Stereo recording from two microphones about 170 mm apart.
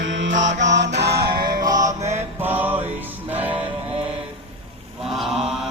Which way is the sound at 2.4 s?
10° right (ahead or behind).